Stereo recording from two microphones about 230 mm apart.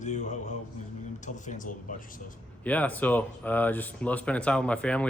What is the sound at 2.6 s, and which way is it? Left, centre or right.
Speech, centre.